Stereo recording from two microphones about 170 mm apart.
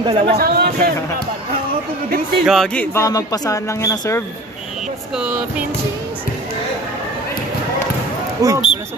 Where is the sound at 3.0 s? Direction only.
20° left (ahead or behind).